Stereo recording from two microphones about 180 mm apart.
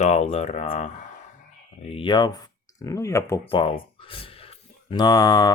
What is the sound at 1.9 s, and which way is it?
Speech, 30° left (ahead or behind).